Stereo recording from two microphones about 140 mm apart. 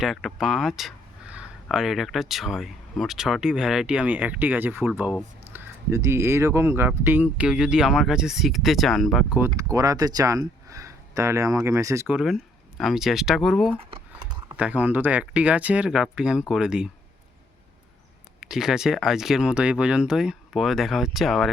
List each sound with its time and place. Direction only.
0.0 s speech: centre (ahead or behind)
9.7 s speech: 25° right (ahead or behind)
12.0 s speech: 5° right (ahead or behind)
18.3 s speech: 5° right (ahead or behind)